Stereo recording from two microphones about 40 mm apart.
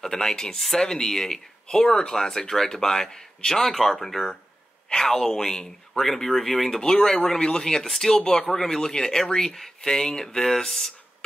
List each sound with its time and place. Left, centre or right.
0.0 s speech: centre
6.8 s speech: centre